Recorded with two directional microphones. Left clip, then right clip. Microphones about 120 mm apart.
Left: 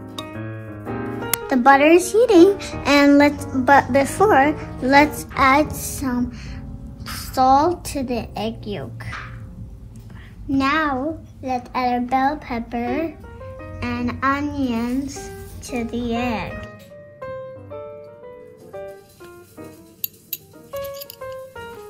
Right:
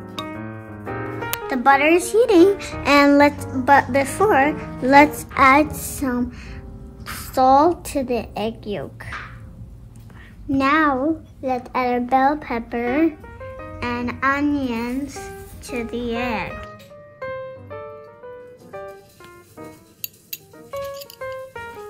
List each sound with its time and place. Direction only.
0.3 s music: 5° left (ahead or behind)
0.8 s music: 15° left (ahead or behind)
1.5 s speech: 5° left (ahead or behind)
5.9 s music: 15° right (ahead or behind)
7.3 s speech: 5° right (ahead or behind)
10.6 s music: 10° right (ahead or behind)
11.7 s speech: 15° right (ahead or behind)
17.2 s music: 25° left (ahead or behind)
17.6 s music: 15° left (ahead or behind)